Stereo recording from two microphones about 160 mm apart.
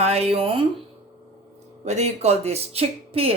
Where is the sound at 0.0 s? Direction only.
40° right (ahead or behind).